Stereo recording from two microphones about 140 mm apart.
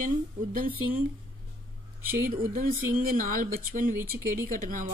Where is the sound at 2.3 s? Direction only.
90° right.